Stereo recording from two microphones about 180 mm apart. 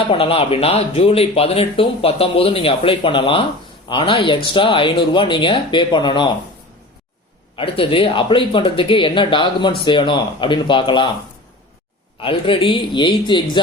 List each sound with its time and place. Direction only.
0.1 s speech: 30° left (ahead or behind)
7.5 s speech: 30° left (ahead or behind)
12.2 s speech: 30° left (ahead or behind)